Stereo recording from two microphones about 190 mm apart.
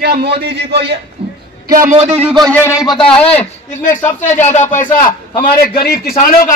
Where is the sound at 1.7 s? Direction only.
40° right (ahead or behind).